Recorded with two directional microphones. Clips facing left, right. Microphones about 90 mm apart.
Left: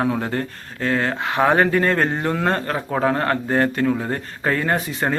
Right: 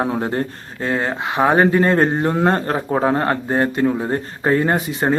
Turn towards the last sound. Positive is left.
turn(degrees=-20)  # may be behind; listen again after turning